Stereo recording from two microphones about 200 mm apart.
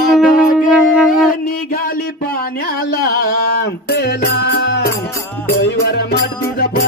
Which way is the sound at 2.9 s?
50° left (ahead or behind).